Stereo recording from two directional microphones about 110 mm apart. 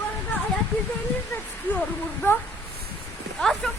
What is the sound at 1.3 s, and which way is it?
Speech, 15° left (ahead or behind).